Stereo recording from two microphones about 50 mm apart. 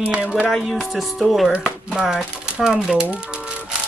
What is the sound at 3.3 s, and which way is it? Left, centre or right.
Ice cream truck, centre.